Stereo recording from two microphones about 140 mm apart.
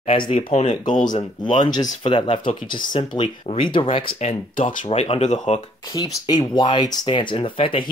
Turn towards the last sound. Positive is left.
turn(degrees=40)  # may be behind; listen again after turning